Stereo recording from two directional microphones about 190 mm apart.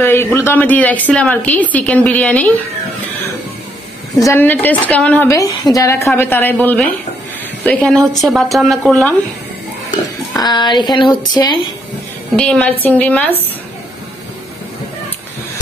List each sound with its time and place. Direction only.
0.0 s a woman's voice: 10° left (ahead or behind)
4.2 s a woman's voice: 10° left (ahead or behind)
10.3 s speech: 20° left (ahead or behind)
12.4 s a woman's voice: 5° left (ahead or behind)